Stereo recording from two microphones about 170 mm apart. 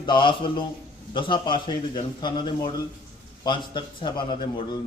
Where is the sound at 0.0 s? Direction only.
30° left (ahead or behind).